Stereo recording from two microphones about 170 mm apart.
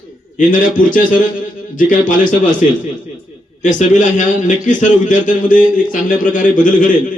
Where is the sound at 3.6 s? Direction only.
45° left (ahead or behind).